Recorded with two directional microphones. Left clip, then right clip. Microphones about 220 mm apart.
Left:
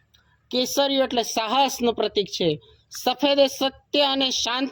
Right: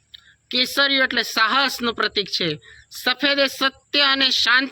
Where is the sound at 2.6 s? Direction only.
20° right (ahead or behind).